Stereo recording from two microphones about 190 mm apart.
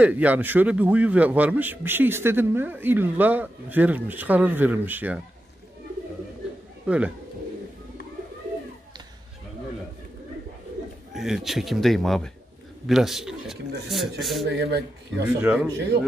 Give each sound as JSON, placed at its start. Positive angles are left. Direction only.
{"t": 0.0, "sound": "a man's voice", "side_deg": -10}
{"t": 6.9, "sound": "a man's voice", "side_deg": -5}
{"t": 11.1, "sound": "speech", "side_deg": 0}
{"t": 14.5, "sound": "speech", "side_deg": -60}
{"t": 15.2, "sound": "a man's voice", "side_deg": -5}